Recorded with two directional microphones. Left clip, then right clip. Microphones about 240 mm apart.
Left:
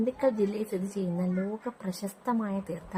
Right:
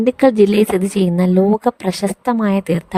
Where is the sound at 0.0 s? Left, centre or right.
Right.